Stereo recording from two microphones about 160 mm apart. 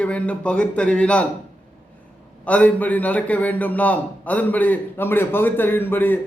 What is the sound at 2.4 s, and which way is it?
A man's voice, 10° left (ahead or behind).